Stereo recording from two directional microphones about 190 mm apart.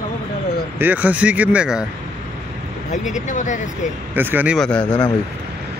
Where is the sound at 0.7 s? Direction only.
10° right (ahead or behind).